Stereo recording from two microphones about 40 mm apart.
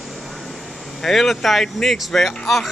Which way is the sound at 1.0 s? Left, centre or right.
Centre.